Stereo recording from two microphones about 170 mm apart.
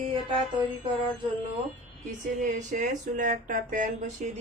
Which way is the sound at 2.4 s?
45° right (ahead or behind).